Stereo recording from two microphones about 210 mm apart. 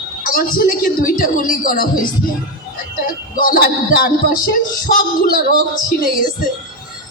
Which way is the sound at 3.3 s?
40° left (ahead or behind).